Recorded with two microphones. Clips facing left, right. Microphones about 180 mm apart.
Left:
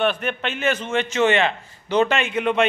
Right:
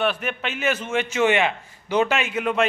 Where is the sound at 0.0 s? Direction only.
5° right (ahead or behind).